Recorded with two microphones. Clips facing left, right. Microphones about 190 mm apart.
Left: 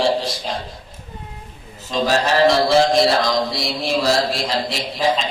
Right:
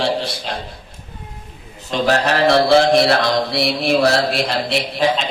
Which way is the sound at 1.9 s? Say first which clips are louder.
Right 1 dB; 65° right (ahead or behind).